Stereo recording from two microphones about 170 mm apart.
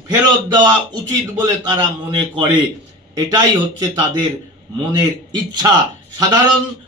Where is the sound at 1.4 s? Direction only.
25° right (ahead or behind).